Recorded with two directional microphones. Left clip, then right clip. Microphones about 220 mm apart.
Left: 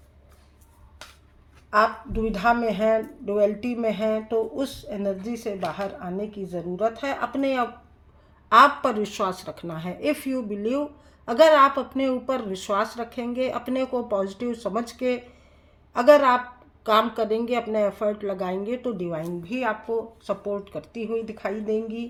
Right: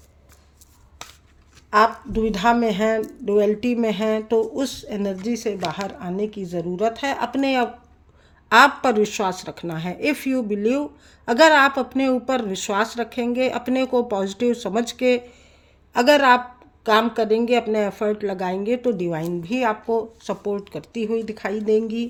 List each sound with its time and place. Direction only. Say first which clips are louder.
1.7 s a woman's voice: right 4 dB; 45° right (ahead or behind)